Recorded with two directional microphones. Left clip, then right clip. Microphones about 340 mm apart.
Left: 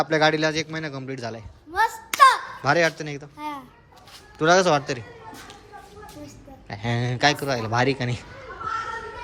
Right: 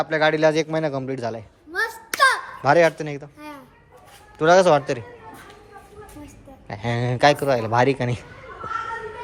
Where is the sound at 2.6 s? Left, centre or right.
Centre.